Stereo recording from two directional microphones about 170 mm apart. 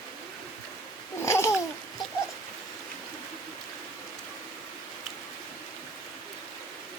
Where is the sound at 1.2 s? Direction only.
15° left (ahead or behind).